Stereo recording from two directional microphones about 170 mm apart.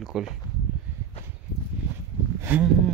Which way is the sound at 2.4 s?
10° right (ahead or behind).